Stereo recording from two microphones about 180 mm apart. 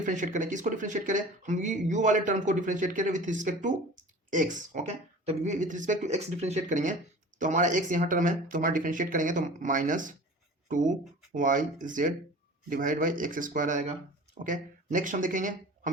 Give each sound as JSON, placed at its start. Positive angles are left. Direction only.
{"t": 0.0, "sound": "speech", "side_deg": -45}